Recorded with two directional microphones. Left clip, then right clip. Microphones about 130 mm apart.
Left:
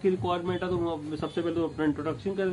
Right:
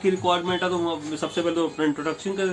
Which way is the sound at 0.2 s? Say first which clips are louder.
Right 7 dB; 25° right (ahead or behind).